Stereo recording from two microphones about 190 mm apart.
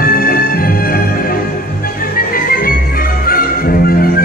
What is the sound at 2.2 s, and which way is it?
Music, 50° left (ahead or behind).